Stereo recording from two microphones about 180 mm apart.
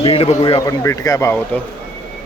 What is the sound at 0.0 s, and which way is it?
Speech, 35° left (ahead or behind).